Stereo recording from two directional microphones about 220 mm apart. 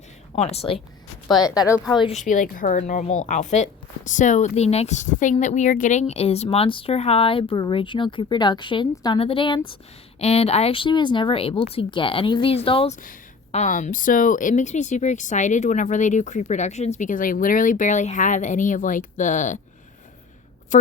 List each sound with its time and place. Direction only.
0.3 s speech: 30° left (ahead or behind)
2.1 s speech: 35° left (ahead or behind)